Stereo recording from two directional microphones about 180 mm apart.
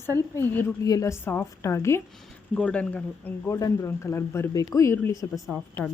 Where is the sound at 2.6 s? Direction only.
5° left (ahead or behind).